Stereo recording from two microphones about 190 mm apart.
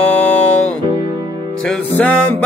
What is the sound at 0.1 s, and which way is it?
Music, 10° left (ahead or behind).